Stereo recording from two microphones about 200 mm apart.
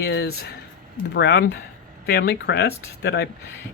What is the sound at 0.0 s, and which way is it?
Speech, 55° left (ahead or behind).